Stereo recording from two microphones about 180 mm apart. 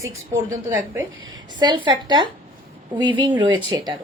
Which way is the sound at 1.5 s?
25° right (ahead or behind).